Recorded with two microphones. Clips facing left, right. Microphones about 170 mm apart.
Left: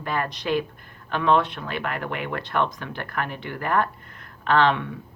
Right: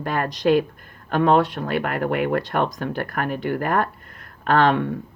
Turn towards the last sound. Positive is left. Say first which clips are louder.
# right 2 dB
turn(degrees=-45)  # may be behind; listen again after turning